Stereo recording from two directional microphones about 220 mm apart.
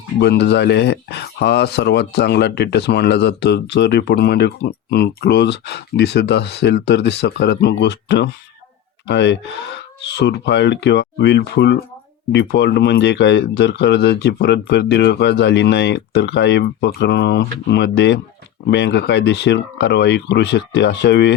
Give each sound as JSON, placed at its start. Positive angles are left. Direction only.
{"t": 0.2, "sound": "speech", "side_deg": 50}